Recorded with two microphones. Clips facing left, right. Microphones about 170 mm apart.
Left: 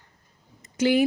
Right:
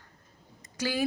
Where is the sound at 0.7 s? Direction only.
20° left (ahead or behind).